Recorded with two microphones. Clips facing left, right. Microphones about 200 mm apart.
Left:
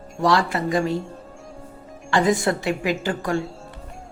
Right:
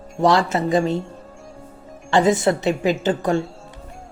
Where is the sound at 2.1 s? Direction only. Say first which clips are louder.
Right 3 dB; 25° right (ahead or behind).